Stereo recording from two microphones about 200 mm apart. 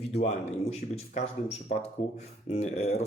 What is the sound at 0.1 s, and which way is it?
Speech, 30° left (ahead or behind).